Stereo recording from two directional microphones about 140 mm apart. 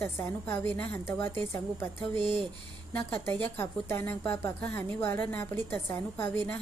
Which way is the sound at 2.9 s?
15° left (ahead or behind).